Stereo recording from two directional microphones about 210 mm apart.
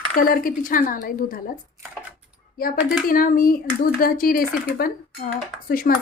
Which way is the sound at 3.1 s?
40° left (ahead or behind).